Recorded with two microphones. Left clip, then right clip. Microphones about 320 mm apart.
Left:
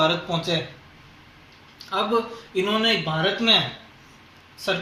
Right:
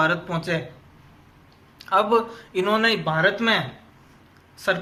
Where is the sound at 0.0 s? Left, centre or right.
Centre.